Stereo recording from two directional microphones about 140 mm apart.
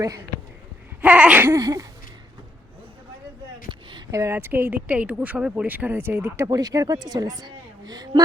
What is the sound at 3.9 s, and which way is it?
Speech, 20° right (ahead or behind).